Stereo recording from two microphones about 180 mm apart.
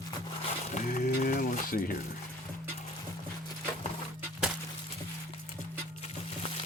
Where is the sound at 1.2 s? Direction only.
50° left (ahead or behind).